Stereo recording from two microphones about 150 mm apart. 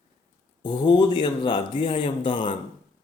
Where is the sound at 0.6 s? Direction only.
30° left (ahead or behind).